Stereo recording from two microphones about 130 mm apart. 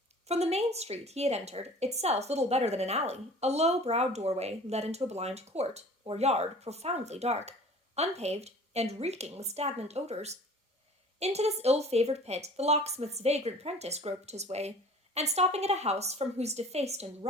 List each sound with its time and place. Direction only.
0.3 s a woman's voice: 55° right (ahead or behind)